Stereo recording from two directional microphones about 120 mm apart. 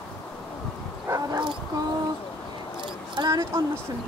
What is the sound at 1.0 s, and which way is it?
Bow-wow, 30° right (ahead or behind).